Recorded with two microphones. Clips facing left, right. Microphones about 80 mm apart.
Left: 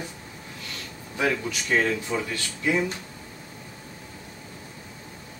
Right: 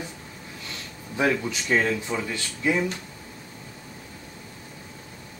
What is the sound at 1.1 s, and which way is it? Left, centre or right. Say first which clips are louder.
Speech: right 2 dB; centre.